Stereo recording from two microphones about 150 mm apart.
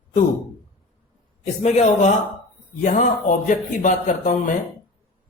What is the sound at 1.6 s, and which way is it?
Speech, 45° left (ahead or behind).